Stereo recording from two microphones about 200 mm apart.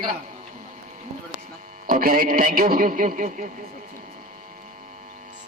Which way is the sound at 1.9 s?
45° right (ahead or behind).